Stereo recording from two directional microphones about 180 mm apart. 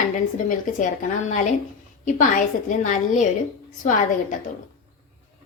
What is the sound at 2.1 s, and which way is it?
A woman's voice, 45° left (ahead or behind).